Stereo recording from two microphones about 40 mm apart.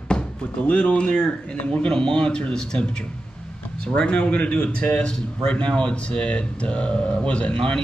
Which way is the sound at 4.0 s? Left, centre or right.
Left.